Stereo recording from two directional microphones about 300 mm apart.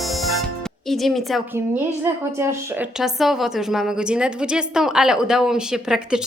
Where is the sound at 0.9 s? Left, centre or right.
Centre.